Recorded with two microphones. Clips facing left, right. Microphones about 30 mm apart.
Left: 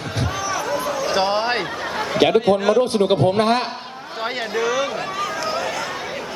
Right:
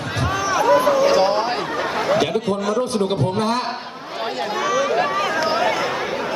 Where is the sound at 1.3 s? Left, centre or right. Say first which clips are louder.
Even; left.